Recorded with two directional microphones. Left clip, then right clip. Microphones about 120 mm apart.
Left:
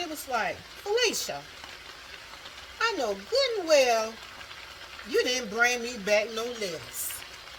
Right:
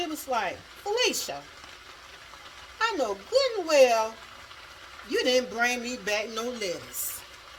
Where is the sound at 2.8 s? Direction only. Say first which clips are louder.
Right 1 dB; 45° right (ahead or behind).